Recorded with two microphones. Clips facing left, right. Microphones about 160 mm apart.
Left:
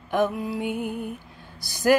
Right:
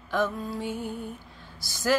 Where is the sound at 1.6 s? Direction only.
55° left (ahead or behind).